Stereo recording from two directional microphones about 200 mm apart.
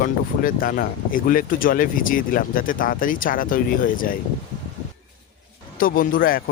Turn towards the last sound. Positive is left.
turn(degrees=45)  # may be behind; listen again after turning